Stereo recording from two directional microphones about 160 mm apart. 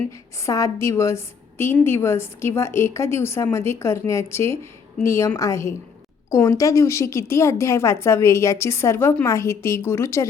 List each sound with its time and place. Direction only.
0.4 s a woman's voice: 20° left (ahead or behind)